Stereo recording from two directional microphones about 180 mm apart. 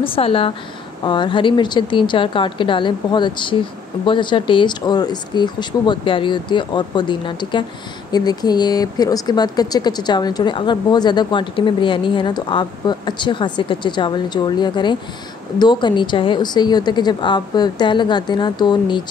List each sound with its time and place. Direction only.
0.0 s speech: 30° left (ahead or behind)